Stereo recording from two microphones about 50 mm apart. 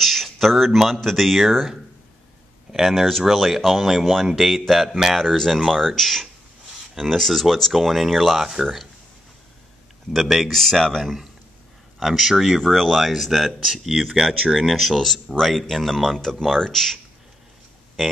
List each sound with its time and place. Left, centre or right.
0.0 s speech: centre
2.7 s speech: centre
10.1 s speech: centre